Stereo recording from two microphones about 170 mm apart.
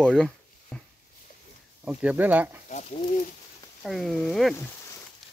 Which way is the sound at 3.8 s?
Centre (ahead or behind).